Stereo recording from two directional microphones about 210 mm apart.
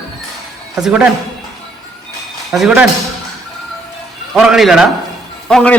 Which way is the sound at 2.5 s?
5° right (ahead or behind).